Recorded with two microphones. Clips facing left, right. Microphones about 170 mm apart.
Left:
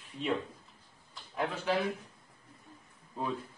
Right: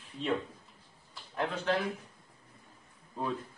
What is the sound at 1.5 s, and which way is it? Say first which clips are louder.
Speech: even; 10° left (ahead or behind).